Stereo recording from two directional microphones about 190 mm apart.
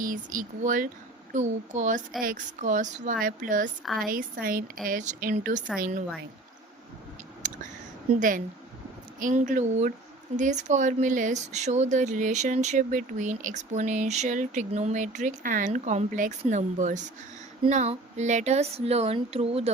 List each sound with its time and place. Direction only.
0.0 s speech: 45° right (ahead or behind)
9.1 s speech: 45° right (ahead or behind)